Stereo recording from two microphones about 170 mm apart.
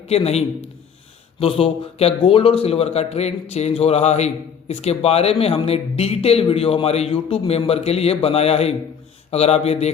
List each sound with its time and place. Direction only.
0.1 s speech: 40° left (ahead or behind)